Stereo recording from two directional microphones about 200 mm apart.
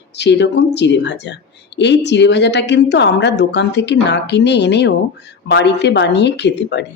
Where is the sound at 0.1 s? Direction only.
60° left (ahead or behind).